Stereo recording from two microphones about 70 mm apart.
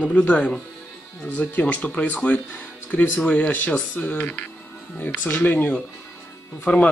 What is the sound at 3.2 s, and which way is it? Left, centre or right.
Speech, centre.